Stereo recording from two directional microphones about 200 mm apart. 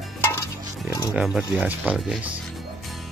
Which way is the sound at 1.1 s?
Centre (ahead or behind).